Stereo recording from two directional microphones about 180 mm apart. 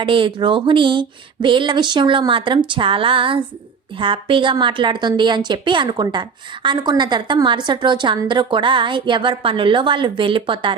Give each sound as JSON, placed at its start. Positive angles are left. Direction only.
{"t": 0.0, "sound": "a woman's voice", "side_deg": -30}